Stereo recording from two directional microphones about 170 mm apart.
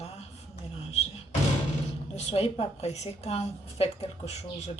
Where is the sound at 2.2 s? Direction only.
35° left (ahead or behind).